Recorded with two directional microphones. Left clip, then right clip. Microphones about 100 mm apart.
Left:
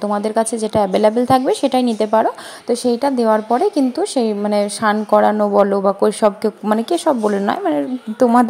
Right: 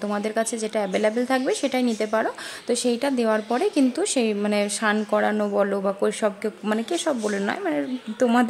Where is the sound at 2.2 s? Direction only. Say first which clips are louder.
Left 7 dB; 30° left (ahead or behind); by 7.8 s 50° left (ahead or behind).